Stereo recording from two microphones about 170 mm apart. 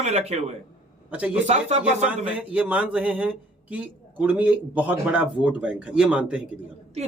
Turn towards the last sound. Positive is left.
turn(degrees=-40)  # may be behind; listen again after turning